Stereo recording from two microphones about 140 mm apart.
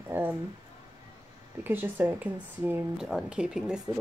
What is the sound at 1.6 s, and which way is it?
Speech, 15° right (ahead or behind).